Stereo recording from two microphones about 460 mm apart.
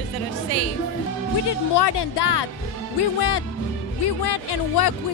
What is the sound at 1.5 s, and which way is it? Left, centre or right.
Speech, left.